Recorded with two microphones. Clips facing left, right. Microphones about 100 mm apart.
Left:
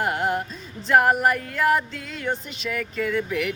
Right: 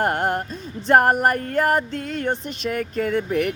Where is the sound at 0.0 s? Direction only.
50° right (ahead or behind).